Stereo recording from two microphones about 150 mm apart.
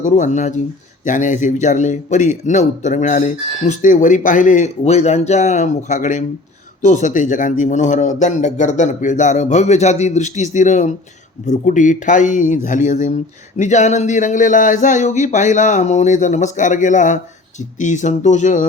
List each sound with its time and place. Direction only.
0.0 s a man's voice: 55° left (ahead or behind)